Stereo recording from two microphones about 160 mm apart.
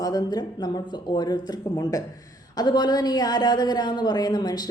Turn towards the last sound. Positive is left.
turn(degrees=25)  # may be behind; listen again after turning